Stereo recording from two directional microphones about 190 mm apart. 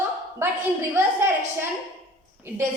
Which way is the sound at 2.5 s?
10° right (ahead or behind).